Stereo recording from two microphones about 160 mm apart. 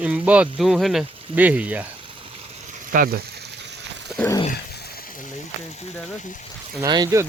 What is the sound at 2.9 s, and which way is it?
Speech, 65° right (ahead or behind).